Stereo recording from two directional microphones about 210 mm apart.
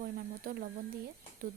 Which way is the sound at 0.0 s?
45° right (ahead or behind).